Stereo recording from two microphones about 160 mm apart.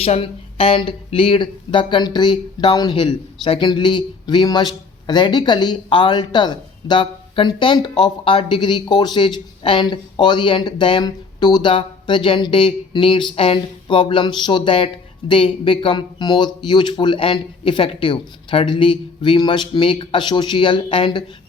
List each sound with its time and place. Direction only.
0.0 s a man's voice: 40° left (ahead or behind)